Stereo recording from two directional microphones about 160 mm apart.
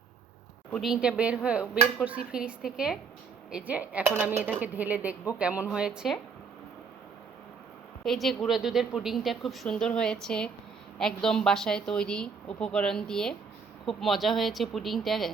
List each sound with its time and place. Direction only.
0.7 s a woman's voice: centre (ahead or behind)
8.0 s a woman's voice: centre (ahead or behind)